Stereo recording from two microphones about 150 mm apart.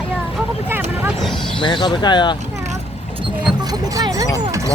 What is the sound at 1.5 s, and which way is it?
Speech, 30° left (ahead or behind).